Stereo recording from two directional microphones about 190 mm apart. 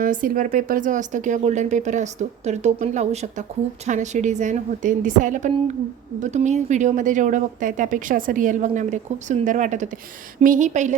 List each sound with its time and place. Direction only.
0.0 s speech: 45° right (ahead or behind)